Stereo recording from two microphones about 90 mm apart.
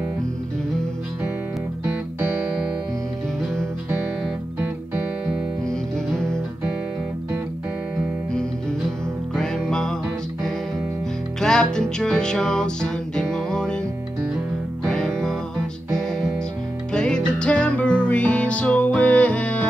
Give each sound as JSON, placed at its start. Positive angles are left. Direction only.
{"t": 6.1, "sound": "music", "side_deg": 5}
{"t": 9.3, "sound": "music", "side_deg": 5}
{"t": 11.4, "sound": "music", "side_deg": 5}
{"t": 14.9, "sound": "music", "side_deg": 10}